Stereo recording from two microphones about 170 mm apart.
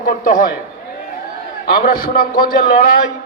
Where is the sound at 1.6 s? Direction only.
55° left (ahead or behind).